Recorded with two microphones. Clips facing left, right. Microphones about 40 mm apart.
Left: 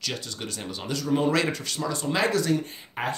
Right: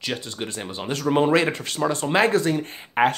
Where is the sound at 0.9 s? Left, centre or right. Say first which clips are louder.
Right 5 dB; right.